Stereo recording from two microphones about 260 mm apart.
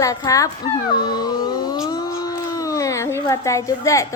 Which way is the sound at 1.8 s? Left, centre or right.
Centre.